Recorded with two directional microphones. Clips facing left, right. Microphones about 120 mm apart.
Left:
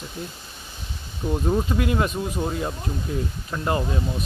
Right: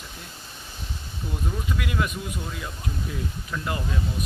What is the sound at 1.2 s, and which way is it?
Speech, 40° left (ahead or behind).